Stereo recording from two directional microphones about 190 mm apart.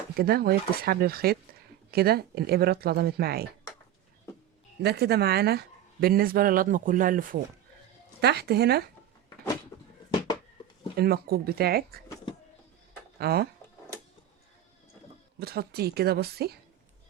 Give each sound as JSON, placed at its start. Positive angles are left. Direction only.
{"t": 0.2, "sound": "speech", "side_deg": -55}
{"t": 4.8, "sound": "speech", "side_deg": -60}
{"t": 8.2, "sound": "speech", "side_deg": -60}
{"t": 10.9, "sound": "speech", "side_deg": -55}
{"t": 13.1, "sound": "speech", "side_deg": -55}
{"t": 15.4, "sound": "speech", "side_deg": -55}